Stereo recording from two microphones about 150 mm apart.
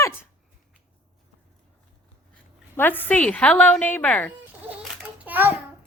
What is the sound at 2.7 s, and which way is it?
Speech, 15° left (ahead or behind).